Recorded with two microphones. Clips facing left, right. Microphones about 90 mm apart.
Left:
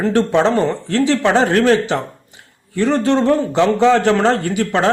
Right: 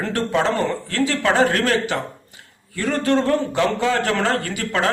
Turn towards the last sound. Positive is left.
turn(degrees=30)  # may be behind; listen again after turning